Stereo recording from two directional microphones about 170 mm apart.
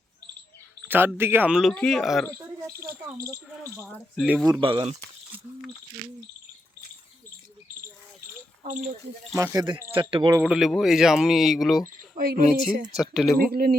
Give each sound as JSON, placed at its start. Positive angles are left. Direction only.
{"t": 0.9, "sound": "speech", "side_deg": -10}
{"t": 3.8, "sound": "speech", "side_deg": 5}
{"t": 4.6, "sound": "speech", "side_deg": -30}
{"t": 8.6, "sound": "speech", "side_deg": -45}
{"t": 9.3, "sound": "speech", "side_deg": -15}
{"t": 10.4, "sound": "speech", "side_deg": -5}
{"t": 12.1, "sound": "speech", "side_deg": -60}
{"t": 13.0, "sound": "speech", "side_deg": 0}
{"t": 13.5, "sound": "speech", "side_deg": -60}